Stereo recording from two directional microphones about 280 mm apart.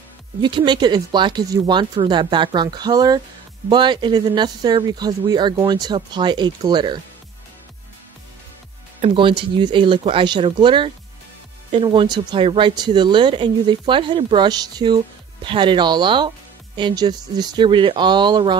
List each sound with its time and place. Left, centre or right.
0.4 s speech: centre
9.0 s speech: centre